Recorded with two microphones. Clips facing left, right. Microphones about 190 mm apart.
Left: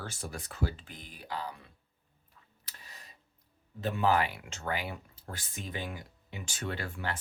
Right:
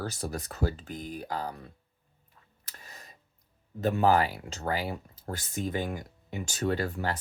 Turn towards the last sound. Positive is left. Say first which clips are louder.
# right 7 dB
turn(degrees=-40)  # may be behind; listen again after turning